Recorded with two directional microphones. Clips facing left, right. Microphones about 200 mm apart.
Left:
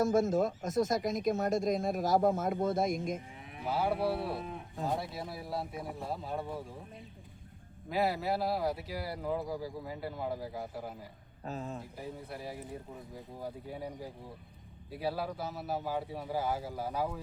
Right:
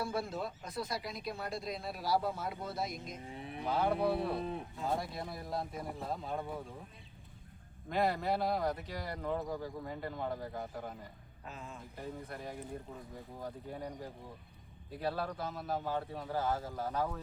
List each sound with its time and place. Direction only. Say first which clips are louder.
0.0 s speech: left 10 dB; 45° left (ahead or behind)
3.7 s speech: even; 5° left (ahead or behind)
7.9 s speech: left 1 dB; 5° left (ahead or behind)
11.4 s speech: left 8 dB; 40° left (ahead or behind)
11.9 s speech: left 1 dB; 5° left (ahead or behind)